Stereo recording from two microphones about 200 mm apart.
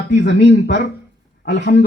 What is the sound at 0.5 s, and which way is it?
Speech, 45° left (ahead or behind).